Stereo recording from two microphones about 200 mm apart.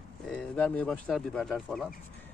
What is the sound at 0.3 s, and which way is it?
Speech, 5° left (ahead or behind).